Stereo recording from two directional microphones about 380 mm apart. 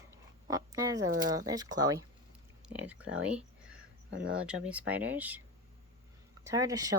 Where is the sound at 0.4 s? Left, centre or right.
Centre.